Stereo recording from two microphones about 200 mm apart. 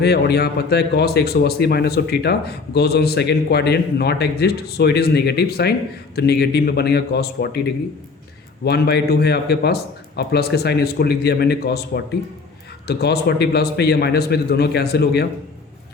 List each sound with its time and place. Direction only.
0.0 s speech: 55° left (ahead or behind)
8.6 s speech: 55° left (ahead or behind)
12.9 s speech: 55° left (ahead or behind)